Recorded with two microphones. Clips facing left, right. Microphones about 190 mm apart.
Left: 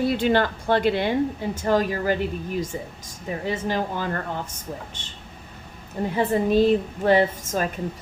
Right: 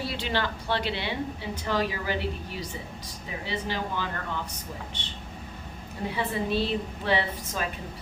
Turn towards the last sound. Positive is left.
turn(degrees=45)  # may be behind; listen again after turning